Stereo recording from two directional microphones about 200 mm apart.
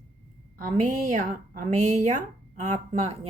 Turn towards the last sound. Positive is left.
turn(degrees=-30)  # may be behind; listen again after turning